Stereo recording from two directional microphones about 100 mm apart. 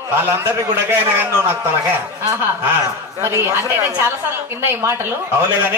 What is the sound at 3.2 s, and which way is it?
A man's voice, 25° right (ahead or behind).